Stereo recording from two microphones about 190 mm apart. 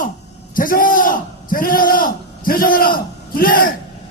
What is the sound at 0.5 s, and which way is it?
A man's voice, 45° left (ahead or behind).